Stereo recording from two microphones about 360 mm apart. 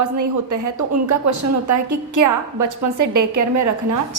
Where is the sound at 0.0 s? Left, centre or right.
Right.